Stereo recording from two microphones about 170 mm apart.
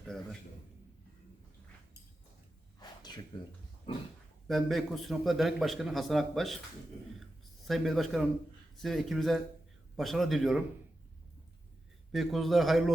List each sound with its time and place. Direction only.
2.8 s a sound: 25° left (ahead or behind)
3.9 s speech: 30° left (ahead or behind)
4.4 s a man's voice: centre (ahead or behind)
7.7 s a man's voice: centre (ahead or behind)
12.1 s a man's voice: centre (ahead or behind)